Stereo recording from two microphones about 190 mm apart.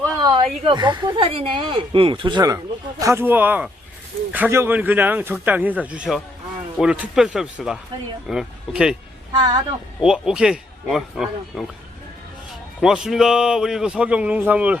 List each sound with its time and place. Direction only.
0.2 s a sound: 20° right (ahead or behind)
0.6 s a man's voice: 25° right (ahead or behind); by 9.0 s 5° right (ahead or behind)
10.0 s a man's voice: 5° right (ahead or behind)
12.8 s a man's voice: 5° right (ahead or behind)